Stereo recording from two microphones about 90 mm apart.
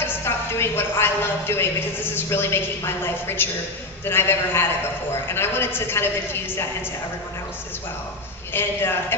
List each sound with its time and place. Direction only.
0.0 s a woman's voice: 25° left (ahead or behind)
8.5 s a woman's voice: 25° left (ahead or behind)